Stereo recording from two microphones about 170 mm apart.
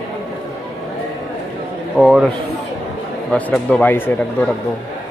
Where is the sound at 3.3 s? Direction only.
10° left (ahead or behind).